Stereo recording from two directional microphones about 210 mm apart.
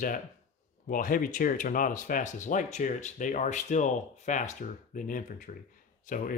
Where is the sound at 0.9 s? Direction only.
40° left (ahead or behind).